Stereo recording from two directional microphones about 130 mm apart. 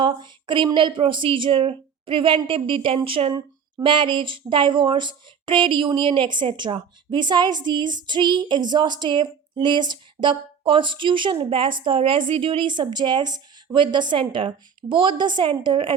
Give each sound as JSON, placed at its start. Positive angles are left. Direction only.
{"t": 0.0, "sound": "speech", "side_deg": -35}
{"t": 3.3, "sound": "speech", "side_deg": -35}